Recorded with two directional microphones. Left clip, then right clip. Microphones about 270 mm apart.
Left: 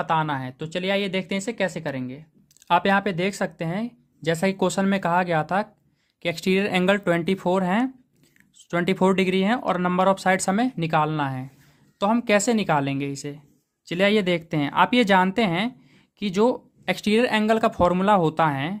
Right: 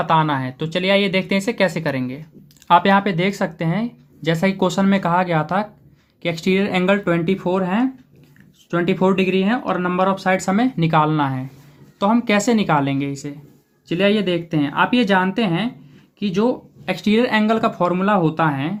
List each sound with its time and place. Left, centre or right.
0.0 s speech: left